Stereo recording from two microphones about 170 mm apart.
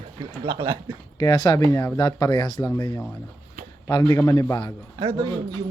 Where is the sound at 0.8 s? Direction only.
25° left (ahead or behind).